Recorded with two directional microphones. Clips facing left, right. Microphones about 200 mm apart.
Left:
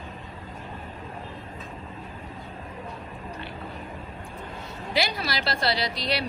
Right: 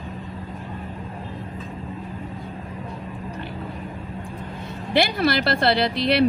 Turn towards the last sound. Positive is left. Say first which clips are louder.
# right 7 dB
turn(degrees=-55)  # may be behind; listen again after turning